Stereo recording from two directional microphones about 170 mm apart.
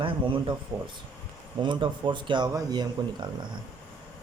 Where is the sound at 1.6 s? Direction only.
25° right (ahead or behind).